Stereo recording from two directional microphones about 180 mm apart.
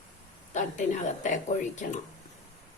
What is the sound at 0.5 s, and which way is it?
Speech, 45° left (ahead or behind).